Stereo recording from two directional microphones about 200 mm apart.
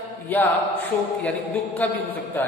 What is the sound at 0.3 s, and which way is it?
Speech, 10° left (ahead or behind).